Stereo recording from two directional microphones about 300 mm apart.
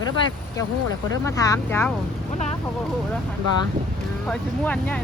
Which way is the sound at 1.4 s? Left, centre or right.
Centre.